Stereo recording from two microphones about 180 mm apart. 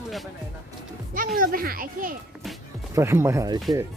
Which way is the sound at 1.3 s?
50° right (ahead or behind).